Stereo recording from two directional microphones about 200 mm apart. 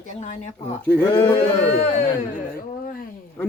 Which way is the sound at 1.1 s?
25° left (ahead or behind).